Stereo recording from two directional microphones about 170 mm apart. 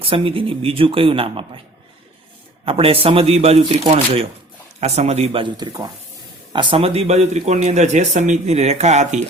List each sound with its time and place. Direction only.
0.0 s speech: 30° right (ahead or behind)
2.6 s speech: 35° right (ahead or behind)